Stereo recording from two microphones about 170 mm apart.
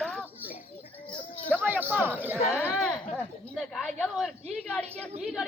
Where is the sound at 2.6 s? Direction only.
10° left (ahead or behind).